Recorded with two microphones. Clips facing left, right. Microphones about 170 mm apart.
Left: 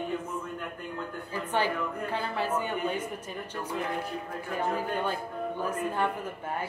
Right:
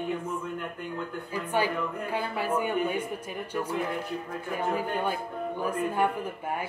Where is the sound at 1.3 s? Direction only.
10° right (ahead or behind).